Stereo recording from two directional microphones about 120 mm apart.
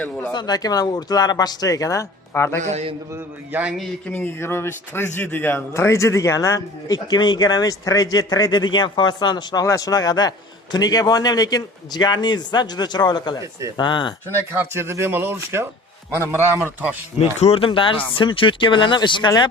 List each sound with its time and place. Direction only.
0.3 s a man's voice: 35° left (ahead or behind)
2.6 s a man's voice: 70° right (ahead or behind)
3.5 s a man's voice: 10° right (ahead or behind)
4.1 s a man's voice: 15° left (ahead or behind); by 13.4 s 35° left (ahead or behind)
13.4 s speech: 25° right (ahead or behind)
13.7 s a man's voice: 40° left (ahead or behind)
14.5 s speech: 20° right (ahead or behind)
17.2 s a man's voice: 60° left (ahead or behind); by 19.3 s 40° left (ahead or behind)